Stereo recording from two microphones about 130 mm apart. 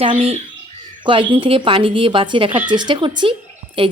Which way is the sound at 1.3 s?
40° right (ahead or behind).